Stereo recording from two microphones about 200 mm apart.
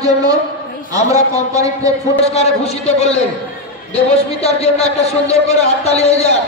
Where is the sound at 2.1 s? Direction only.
30° left (ahead or behind).